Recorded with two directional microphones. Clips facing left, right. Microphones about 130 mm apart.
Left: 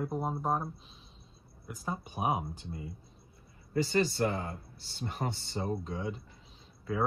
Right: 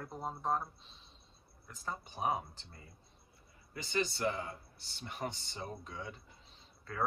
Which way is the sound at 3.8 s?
40° left (ahead or behind).